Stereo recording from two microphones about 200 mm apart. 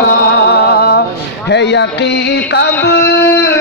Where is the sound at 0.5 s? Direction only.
50° left (ahead or behind).